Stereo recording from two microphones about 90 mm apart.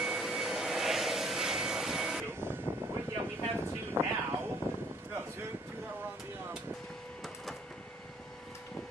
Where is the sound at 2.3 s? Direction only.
25° right (ahead or behind).